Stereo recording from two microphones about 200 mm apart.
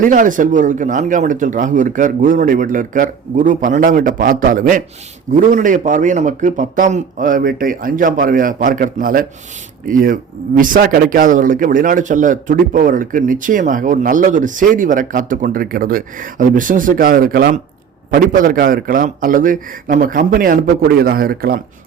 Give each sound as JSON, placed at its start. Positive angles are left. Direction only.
{"t": 0.0, "sound": "a man's voice", "side_deg": -40}